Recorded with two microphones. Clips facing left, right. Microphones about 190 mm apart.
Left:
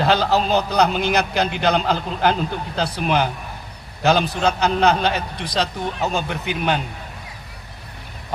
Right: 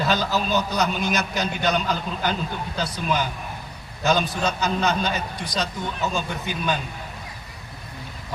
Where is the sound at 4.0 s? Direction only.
60° left (ahead or behind).